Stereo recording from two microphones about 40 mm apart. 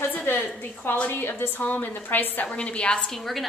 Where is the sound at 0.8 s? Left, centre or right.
Left.